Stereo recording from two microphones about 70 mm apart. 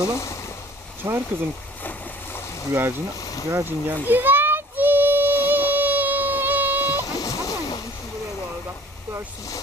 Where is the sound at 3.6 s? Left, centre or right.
Right.